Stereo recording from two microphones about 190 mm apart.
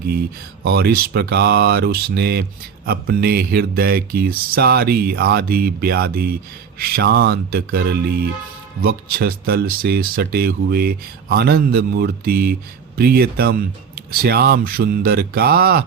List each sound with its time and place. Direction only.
0.6 s speech: 55° right (ahead or behind)
6.7 s music: 55° right (ahead or behind)
8.8 s speech: 55° right (ahead or behind)